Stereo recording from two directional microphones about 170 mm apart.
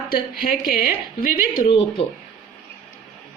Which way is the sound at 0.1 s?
55° left (ahead or behind).